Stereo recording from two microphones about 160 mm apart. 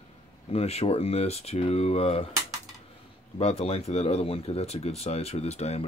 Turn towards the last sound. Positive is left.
turn(degrees=40)  # may be behind; listen again after turning